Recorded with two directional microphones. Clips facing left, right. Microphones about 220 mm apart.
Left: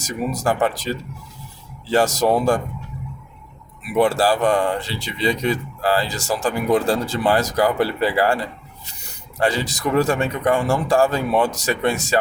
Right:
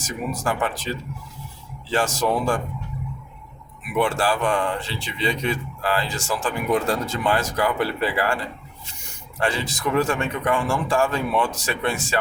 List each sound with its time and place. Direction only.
0.3 s speech: 40° left (ahead or behind)
3.9 s speech: 35° left (ahead or behind)